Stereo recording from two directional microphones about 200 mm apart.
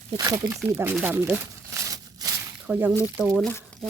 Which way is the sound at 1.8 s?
20° right (ahead or behind).